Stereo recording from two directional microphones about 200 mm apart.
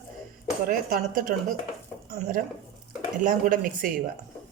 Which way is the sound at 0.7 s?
45° right (ahead or behind).